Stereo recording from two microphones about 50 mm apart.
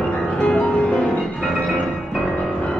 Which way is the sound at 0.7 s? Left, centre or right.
Centre.